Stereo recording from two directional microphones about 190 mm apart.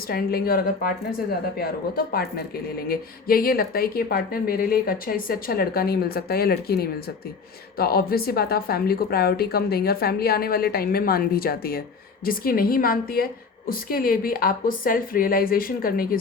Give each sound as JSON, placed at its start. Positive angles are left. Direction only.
{"t": 0.1, "sound": "a woman's voice", "side_deg": 55}